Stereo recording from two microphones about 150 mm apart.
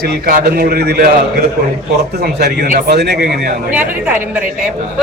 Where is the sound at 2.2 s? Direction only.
90° right.